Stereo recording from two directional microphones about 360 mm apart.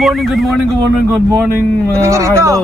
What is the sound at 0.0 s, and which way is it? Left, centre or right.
Speech, centre.